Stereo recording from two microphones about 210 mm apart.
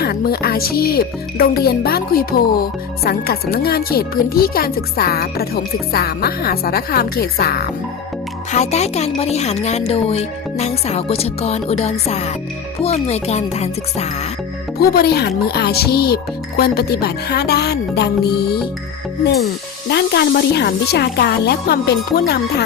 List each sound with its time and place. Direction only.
0.0 s speech: 45° left (ahead or behind)
8.5 s speech: 30° left (ahead or behind)
14.8 s speech: 45° left (ahead or behind)
19.9 s speech: 55° left (ahead or behind)